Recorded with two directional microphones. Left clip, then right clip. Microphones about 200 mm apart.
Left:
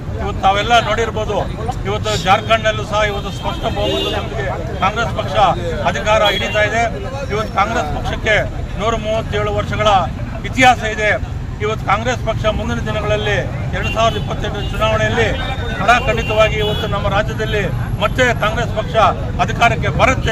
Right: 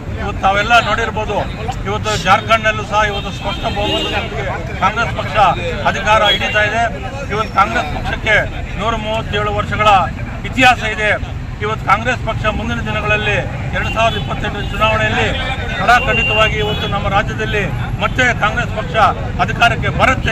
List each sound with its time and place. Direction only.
0.3 s speech: 10° left (ahead or behind)
4.8 s speech: 10° left (ahead or behind)
15.4 s a sound: 60° left (ahead or behind)
15.9 s speech: 10° left (ahead or behind)